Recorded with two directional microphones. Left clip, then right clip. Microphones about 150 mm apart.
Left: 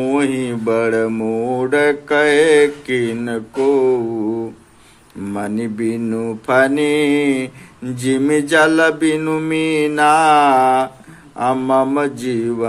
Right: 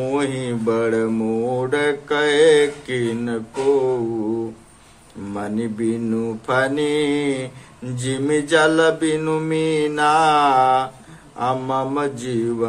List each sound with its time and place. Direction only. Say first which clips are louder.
0.0 s mantra: left 4 dB; 30° left (ahead or behind)
5.3 s mantra: left 3 dB; 35° left (ahead or behind)